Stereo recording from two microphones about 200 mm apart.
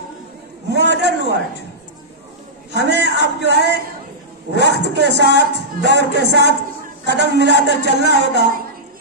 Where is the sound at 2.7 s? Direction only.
60° right (ahead or behind).